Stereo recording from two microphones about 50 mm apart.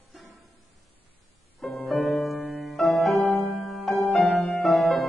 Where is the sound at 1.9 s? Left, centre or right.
Centre.